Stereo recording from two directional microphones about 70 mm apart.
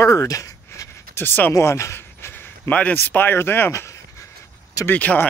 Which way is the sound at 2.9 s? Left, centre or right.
Left.